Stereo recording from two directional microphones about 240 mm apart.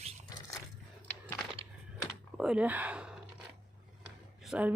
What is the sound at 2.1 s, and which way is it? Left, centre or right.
Computer keyboard, centre.